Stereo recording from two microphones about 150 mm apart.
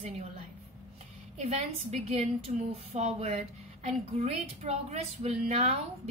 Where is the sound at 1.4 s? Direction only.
45° right (ahead or behind).